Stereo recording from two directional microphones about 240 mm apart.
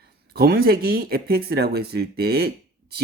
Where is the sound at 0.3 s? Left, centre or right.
Right.